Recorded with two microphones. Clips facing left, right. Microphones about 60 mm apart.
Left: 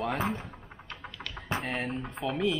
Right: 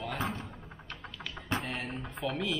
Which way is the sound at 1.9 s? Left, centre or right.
Centre.